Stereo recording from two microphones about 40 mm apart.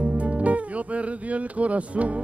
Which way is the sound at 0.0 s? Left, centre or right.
Right.